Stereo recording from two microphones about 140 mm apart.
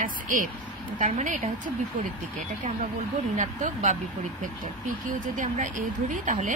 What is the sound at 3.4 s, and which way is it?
Speech, 60° right (ahead or behind).